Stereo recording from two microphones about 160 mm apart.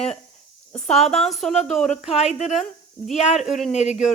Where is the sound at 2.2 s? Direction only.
45° left (ahead or behind).